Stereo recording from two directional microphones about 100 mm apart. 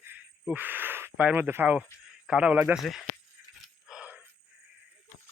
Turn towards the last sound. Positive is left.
turn(degrees=-15)  # may be behind; listen again after turning